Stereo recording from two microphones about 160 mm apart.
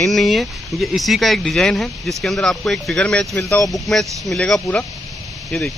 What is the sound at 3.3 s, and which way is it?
Speech, 20° left (ahead or behind).